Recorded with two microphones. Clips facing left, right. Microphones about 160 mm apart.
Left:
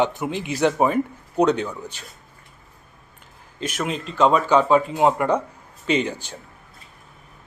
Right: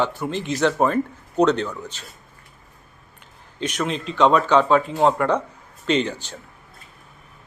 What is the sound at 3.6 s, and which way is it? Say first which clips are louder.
Speech: right 1 dB; 5° left (ahead or behind).